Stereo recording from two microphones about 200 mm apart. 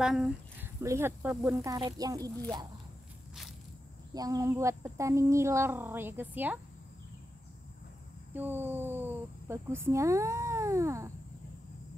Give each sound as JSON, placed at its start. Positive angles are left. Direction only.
{"t": 0.0, "sound": "speech", "side_deg": -5}
{"t": 4.1, "sound": "a woman's voice", "side_deg": -20}
{"t": 8.3, "sound": "a woman's voice", "side_deg": -10}